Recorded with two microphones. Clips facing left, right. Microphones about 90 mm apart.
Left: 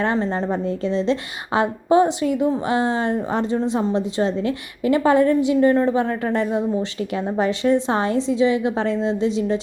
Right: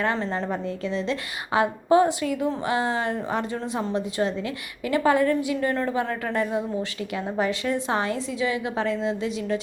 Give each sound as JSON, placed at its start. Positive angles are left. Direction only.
{"t": 0.2, "sound": "a woman's voice", "side_deg": 25}